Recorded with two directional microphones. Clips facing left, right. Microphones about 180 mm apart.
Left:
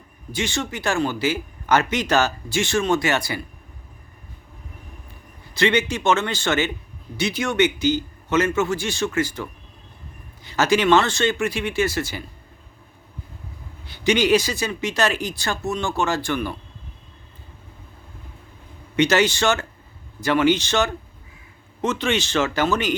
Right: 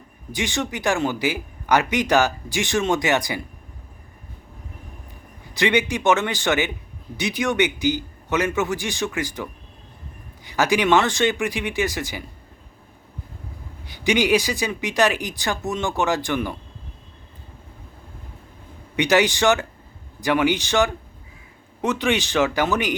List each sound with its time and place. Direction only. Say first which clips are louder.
0.3 s speech: even; 15° right (ahead or behind)
5.5 s speech: even; 15° right (ahead or behind)
13.8 s speech: left 1 dB; 15° right (ahead or behind)
18.9 s speech: even; 15° right (ahead or behind)